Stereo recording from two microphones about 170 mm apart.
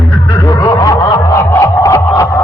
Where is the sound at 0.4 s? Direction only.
20° left (ahead or behind).